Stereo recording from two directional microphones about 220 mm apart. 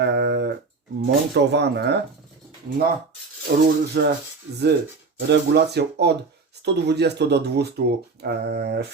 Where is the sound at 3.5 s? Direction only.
50° right (ahead or behind).